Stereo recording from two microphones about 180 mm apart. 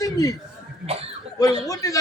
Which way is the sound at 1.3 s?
20° left (ahead or behind).